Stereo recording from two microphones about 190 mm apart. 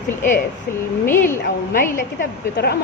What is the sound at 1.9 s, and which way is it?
Speech, 50° left (ahead or behind).